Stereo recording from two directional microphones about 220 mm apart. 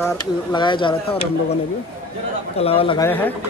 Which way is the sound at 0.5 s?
20° left (ahead or behind).